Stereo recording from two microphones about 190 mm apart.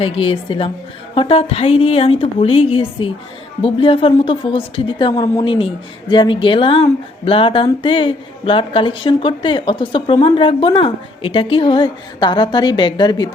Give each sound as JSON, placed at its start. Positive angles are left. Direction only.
{"t": 0.0, "sound": "a woman's voice", "side_deg": 30}